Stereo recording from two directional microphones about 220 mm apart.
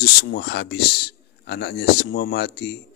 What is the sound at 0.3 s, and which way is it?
Speech, 50° left (ahead or behind).